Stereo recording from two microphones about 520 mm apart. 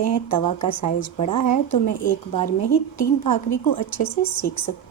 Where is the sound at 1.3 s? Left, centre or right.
Left.